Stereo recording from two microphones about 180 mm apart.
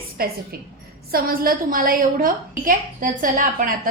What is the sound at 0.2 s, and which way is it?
A woman's voice, 55° right (ahead or behind).